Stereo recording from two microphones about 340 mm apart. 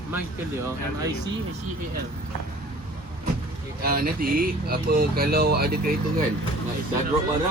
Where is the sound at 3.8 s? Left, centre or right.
Right.